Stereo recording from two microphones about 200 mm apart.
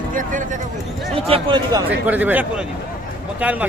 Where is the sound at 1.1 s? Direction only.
25° right (ahead or behind).